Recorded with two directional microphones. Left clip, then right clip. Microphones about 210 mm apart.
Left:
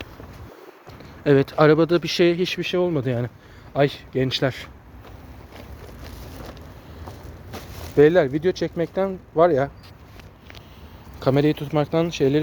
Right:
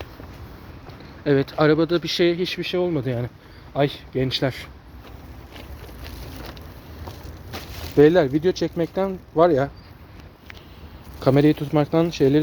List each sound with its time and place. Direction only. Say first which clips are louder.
1.2 s speech: left 3 dB; 25° left (ahead or behind)
7.9 s speech: even; 10° right (ahead or behind)
11.2 s speech: right 2 dB; 15° right (ahead or behind)